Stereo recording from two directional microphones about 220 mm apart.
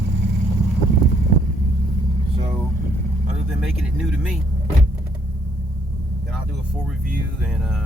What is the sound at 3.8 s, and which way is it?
Speech, centre (ahead or behind).